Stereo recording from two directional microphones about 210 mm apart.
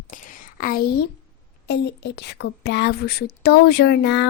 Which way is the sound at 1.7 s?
55° left (ahead or behind).